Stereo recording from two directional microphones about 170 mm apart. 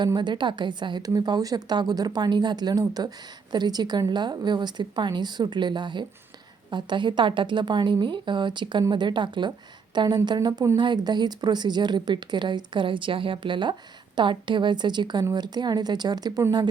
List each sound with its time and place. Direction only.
0.0 s speech: 25° right (ahead or behind)